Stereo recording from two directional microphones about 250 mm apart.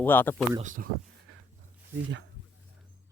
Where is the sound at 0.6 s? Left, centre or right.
Right.